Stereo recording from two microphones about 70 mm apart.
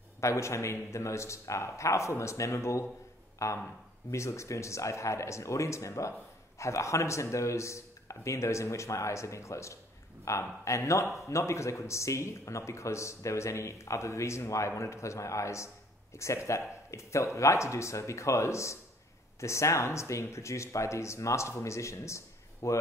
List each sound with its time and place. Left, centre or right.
0.2 s speech: left